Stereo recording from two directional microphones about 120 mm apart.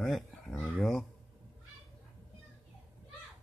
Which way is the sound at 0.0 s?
Centre (ahead or behind).